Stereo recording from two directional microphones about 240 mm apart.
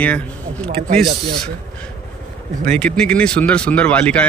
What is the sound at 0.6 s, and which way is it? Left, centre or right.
Speech, right.